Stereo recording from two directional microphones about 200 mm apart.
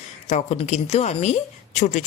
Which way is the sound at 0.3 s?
35° left (ahead or behind).